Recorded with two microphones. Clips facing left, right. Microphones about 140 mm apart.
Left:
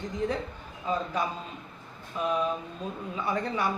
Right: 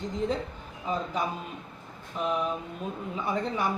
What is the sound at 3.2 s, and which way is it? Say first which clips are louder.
Speech: even; 20° right (ahead or behind).